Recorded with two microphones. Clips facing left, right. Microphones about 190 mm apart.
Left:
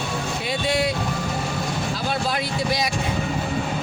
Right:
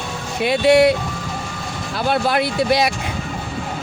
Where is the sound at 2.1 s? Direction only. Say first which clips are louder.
Right 10 dB; 65° right (ahead or behind).